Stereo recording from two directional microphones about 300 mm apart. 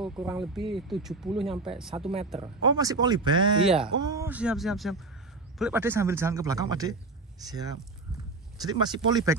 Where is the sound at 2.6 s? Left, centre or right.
Centre.